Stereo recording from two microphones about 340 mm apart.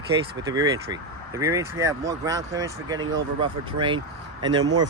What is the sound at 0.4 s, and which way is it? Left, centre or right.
Speech, centre.